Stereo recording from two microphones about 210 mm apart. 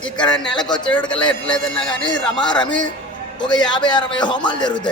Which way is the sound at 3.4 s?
20° left (ahead or behind).